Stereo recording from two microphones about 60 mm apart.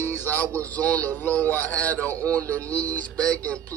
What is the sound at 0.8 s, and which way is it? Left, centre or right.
Speech, left.